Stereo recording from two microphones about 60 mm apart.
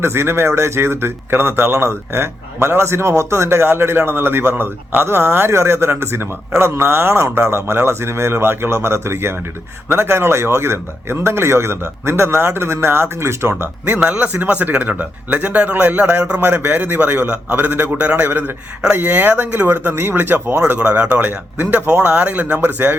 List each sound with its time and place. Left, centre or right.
0.0 s speech: right
13.9 s speech: right
20.7 s speech: right